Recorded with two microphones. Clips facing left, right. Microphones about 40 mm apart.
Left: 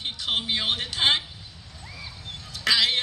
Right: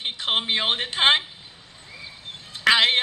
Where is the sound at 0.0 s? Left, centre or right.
Right.